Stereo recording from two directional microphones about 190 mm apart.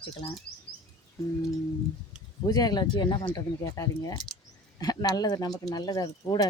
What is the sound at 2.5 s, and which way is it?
Speech, 20° left (ahead or behind).